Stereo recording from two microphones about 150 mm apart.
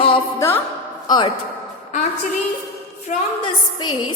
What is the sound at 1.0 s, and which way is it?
Speech, 30° left (ahead or behind).